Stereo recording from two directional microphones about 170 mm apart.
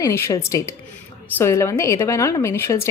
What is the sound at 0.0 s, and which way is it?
A woman's voice, 15° left (ahead or behind).